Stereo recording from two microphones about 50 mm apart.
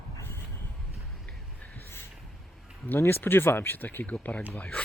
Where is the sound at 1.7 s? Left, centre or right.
Left.